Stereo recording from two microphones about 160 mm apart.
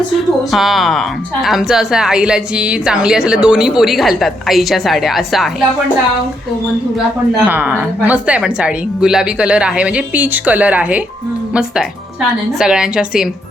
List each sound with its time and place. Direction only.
0.5 s speech: centre (ahead or behind)
7.4 s a woman's voice: 10° right (ahead or behind)